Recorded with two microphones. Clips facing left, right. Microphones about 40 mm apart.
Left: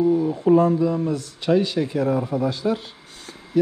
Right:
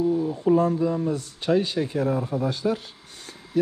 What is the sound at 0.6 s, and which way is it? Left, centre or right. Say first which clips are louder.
Speech: left 4 dB; left.